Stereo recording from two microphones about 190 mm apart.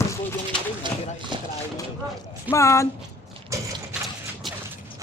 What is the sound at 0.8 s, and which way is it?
Clip-clop, 25° right (ahead or behind).